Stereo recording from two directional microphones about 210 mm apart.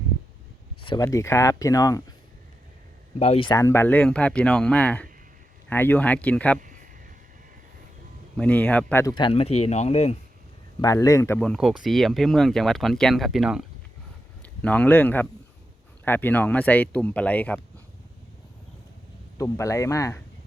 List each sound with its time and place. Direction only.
0.8 s speech: 20° left (ahead or behind)
3.2 s speech: 25° left (ahead or behind); by 6.6 s 5° left (ahead or behind)
6.6 s a sound: 40° right (ahead or behind)
8.4 s speech: 5° left (ahead or behind); by 10.2 s 30° left (ahead or behind)
10.8 s a man's voice: 15° left (ahead or behind)
19.4 s speech: 15° left (ahead or behind)